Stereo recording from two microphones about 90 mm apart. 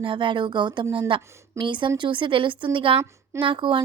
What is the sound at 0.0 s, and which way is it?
Speech, 65° right (ahead or behind).